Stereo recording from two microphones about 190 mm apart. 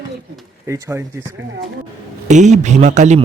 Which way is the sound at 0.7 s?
15° right (ahead or behind).